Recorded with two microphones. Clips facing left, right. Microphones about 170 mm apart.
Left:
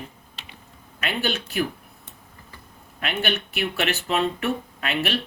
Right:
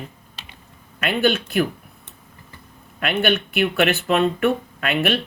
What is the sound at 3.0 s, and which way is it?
Speech, 55° right (ahead or behind).